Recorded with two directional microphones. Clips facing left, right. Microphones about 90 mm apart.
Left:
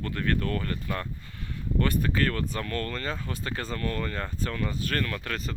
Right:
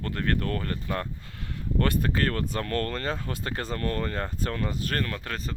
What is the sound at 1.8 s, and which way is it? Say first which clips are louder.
Speech: even; 45° right (ahead or behind).